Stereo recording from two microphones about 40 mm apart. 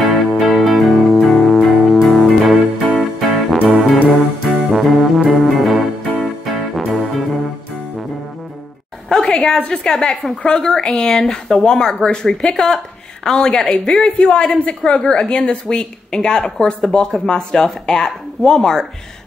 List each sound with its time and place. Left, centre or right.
0.0 s music: centre
9.1 s a sound: centre
9.7 s a woman's voice: left